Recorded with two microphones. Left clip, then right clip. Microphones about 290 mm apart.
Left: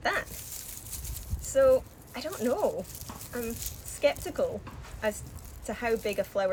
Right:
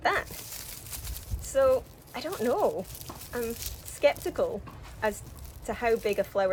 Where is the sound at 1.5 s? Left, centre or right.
Centre.